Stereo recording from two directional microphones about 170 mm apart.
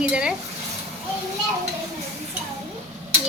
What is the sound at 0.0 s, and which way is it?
Speech, 5° right (ahead or behind).